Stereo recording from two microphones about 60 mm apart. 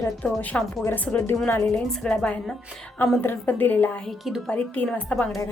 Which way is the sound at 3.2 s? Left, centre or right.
Left.